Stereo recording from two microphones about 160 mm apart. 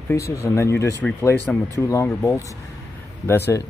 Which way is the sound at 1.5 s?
5° left (ahead or behind).